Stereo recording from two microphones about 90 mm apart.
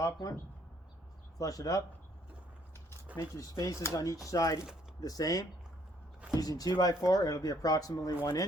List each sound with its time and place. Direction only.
0.0 s speech: 40° left (ahead or behind)
1.4 s speech: 40° left (ahead or behind)
3.2 s speech: 40° left (ahead or behind)